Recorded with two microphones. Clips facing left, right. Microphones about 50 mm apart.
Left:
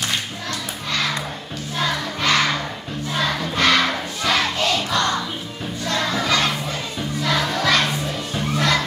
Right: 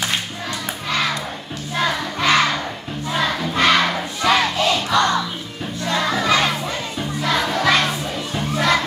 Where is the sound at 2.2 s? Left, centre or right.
Centre.